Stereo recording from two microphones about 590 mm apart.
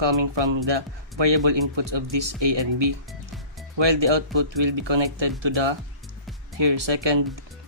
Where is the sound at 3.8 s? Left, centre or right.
Right.